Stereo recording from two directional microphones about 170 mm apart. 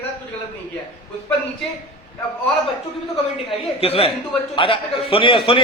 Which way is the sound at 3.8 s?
35° left (ahead or behind).